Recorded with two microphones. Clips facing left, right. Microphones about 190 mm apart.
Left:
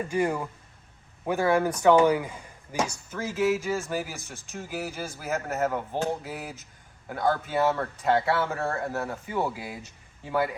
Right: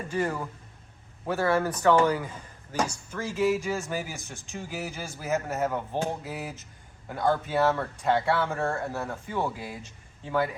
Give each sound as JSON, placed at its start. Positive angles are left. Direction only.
{"t": 0.1, "sound": "a man's voice", "side_deg": 10}